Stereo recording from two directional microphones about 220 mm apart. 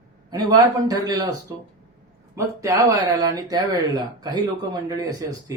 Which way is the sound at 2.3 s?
15° right (ahead or behind).